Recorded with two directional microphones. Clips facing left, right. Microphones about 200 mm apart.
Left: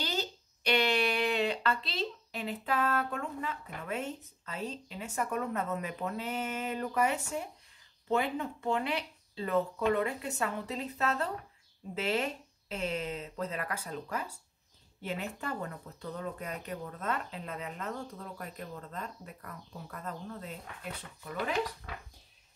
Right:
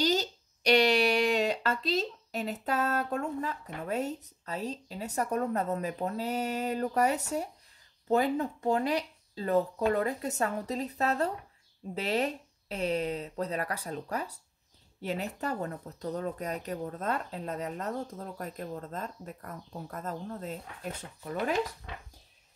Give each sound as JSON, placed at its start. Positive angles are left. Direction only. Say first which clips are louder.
{"t": 0.0, "sound": "speech", "louder": "right 7 dB", "side_deg": -40}